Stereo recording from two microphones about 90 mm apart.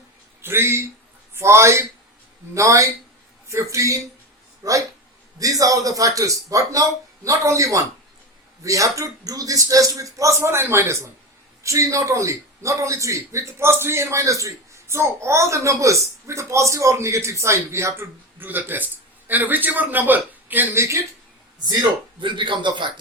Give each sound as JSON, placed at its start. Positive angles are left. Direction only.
{"t": 0.4, "sound": "a man's voice", "side_deg": -25}
{"t": 22.2, "sound": "a man's voice", "side_deg": -60}